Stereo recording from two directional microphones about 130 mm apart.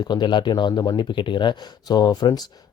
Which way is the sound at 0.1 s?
35° left (ahead or behind).